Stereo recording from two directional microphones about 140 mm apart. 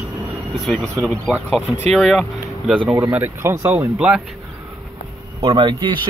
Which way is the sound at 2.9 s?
15° right (ahead or behind).